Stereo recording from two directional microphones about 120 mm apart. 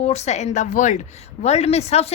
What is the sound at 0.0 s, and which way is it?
A woman's voice, 60° left (ahead or behind).